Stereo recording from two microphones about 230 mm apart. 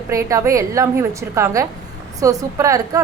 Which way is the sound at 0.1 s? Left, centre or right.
Centre.